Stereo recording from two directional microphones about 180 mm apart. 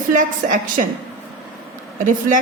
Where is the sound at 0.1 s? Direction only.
45° right (ahead or behind).